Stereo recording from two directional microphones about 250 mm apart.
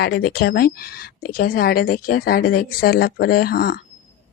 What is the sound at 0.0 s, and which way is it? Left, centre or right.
A woman's voice, left.